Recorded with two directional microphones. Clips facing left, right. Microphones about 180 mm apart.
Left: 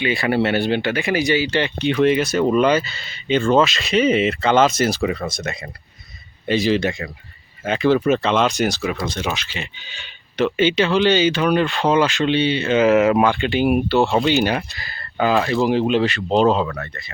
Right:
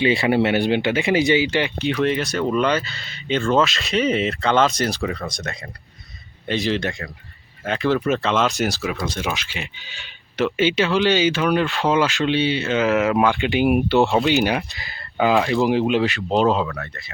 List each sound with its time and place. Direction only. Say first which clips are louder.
0.0 s speech: right 1 dB; 25° right (ahead or behind)
1.8 s speech: left 7 dB; centre (ahead or behind)
13.4 s speech: even; 15° right (ahead or behind)
14.1 s speech: left 1 dB; centre (ahead or behind)